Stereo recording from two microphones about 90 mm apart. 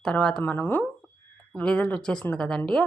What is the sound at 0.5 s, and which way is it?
Speech, 20° left (ahead or behind).